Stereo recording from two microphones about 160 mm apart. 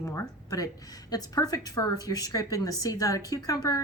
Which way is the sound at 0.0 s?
20° left (ahead or behind).